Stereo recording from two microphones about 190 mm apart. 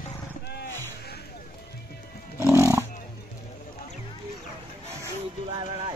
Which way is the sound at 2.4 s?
15° right (ahead or behind).